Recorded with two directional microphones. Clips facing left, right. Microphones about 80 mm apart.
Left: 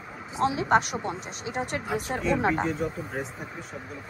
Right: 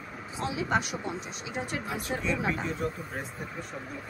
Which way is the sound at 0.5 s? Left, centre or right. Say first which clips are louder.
Left 3 dB; left.